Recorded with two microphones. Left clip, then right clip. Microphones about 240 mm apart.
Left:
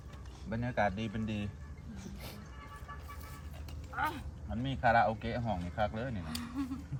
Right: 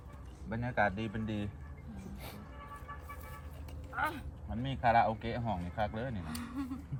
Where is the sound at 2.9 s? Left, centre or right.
Right.